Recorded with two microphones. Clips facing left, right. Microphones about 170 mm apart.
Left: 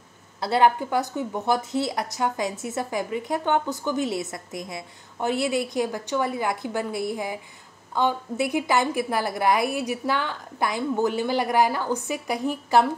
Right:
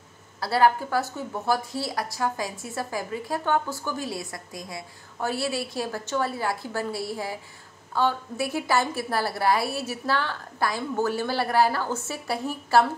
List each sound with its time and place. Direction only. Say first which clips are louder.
0.4 s a woman's voice: left 1 dB; 20° left (ahead or behind)